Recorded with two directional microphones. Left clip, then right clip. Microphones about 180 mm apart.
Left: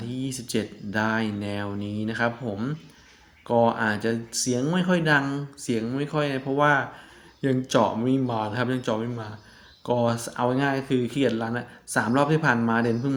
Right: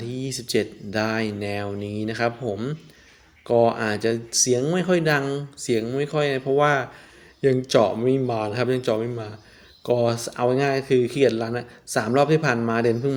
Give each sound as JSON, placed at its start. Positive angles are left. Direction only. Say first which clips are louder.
{"t": 0.0, "sound": "speech", "louder": "right 3 dB", "side_deg": -35}